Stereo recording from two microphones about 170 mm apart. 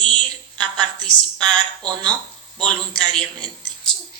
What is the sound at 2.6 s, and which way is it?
Speech, 5° left (ahead or behind).